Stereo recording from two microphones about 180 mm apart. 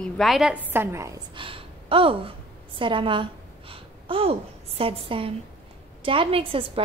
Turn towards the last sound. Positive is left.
turn(degrees=-30)  # may be behind; listen again after turning